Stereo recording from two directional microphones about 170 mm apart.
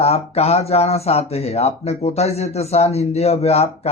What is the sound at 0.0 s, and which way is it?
Speech, 40° left (ahead or behind).